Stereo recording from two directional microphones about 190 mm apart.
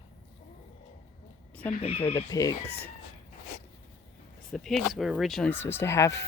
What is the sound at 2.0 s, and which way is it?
Speech, 20° left (ahead or behind).